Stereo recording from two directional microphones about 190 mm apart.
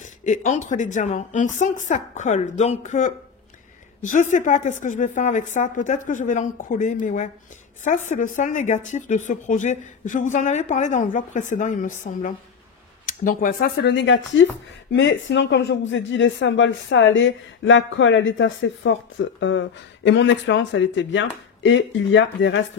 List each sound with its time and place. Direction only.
0.0 s speech: 40° left (ahead or behind); by 22.6 s 75° left (ahead or behind)